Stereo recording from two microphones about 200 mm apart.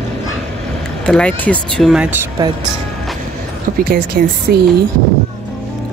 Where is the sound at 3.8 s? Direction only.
45° right (ahead or behind).